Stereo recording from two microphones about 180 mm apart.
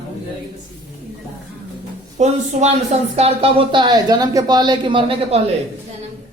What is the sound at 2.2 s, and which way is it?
Speech, 40° right (ahead or behind).